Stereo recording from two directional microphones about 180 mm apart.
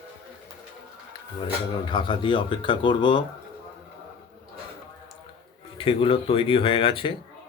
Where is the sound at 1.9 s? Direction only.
25° left (ahead or behind).